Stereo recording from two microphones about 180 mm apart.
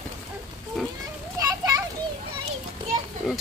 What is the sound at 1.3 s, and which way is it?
Children playing, 20° right (ahead or behind).